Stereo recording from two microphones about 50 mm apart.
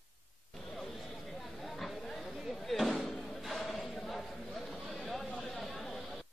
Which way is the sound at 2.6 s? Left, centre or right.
Centre.